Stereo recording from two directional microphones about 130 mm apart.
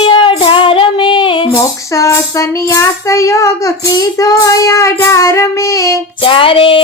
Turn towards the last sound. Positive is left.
turn(degrees=40)  # may be behind; listen again after turning